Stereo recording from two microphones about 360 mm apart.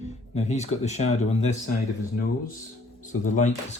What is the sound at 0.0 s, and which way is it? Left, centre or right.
Speech, centre.